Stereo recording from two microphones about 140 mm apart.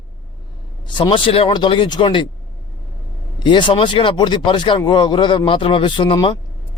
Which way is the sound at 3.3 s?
35° left (ahead or behind).